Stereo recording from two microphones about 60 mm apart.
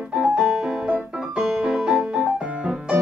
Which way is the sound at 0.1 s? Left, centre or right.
Centre.